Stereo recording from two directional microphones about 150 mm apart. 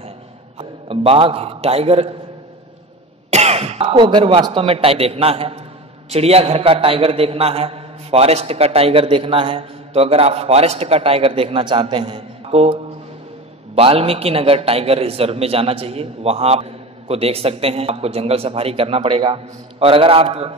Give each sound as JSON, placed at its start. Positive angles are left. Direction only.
{"t": 0.6, "sound": "a man's voice", "side_deg": -40}
{"t": 3.3, "sound": "a man's voice", "side_deg": -45}
{"t": 13.7, "sound": "a man's voice", "side_deg": -40}